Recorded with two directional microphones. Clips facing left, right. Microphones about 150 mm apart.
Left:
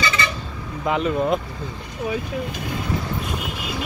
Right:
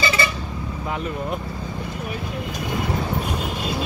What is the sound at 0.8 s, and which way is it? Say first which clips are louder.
Speech: left 8 dB; 90° left.